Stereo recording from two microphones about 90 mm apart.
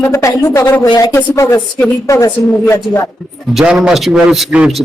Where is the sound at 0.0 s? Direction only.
35° left (ahead or behind).